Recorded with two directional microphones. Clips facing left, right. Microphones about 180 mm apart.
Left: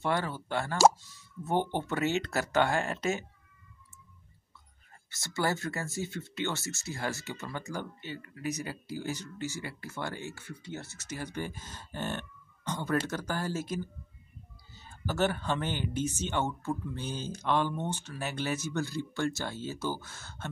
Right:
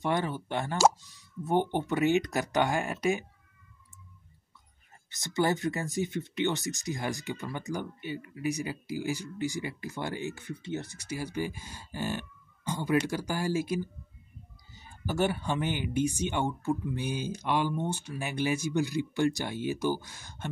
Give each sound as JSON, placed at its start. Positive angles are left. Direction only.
{"t": 0.0, "sound": "speech", "side_deg": -20}
{"t": 5.1, "sound": "speech", "side_deg": -20}